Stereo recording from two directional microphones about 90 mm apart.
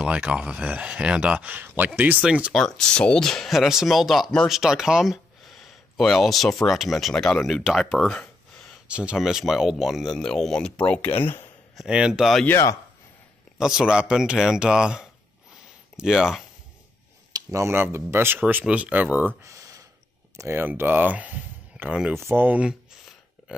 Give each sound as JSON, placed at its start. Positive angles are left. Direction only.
{"t": 0.1, "sound": "speech", "side_deg": -15}
{"t": 2.5, "sound": "speech", "side_deg": 5}
{"t": 8.8, "sound": "speech", "side_deg": -10}
{"t": 11.7, "sound": "speech", "side_deg": -5}
{"t": 13.6, "sound": "speech", "side_deg": -5}
{"t": 17.5, "sound": "speech", "side_deg": -30}
{"t": 18.4, "sound": "speech", "side_deg": -15}
{"t": 19.4, "sound": "a sound", "side_deg": -35}
{"t": 20.3, "sound": "speech", "side_deg": -30}
{"t": 22.1, "sound": "speech", "side_deg": -25}